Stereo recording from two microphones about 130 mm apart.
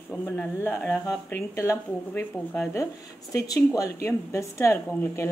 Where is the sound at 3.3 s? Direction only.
25° left (ahead or behind).